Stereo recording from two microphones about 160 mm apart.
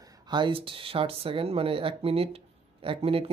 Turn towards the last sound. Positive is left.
turn(degrees=-35)  # may be behind; listen again after turning